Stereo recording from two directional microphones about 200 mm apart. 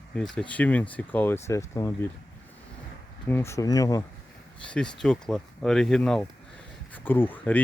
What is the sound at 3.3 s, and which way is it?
Speech, 10° left (ahead or behind).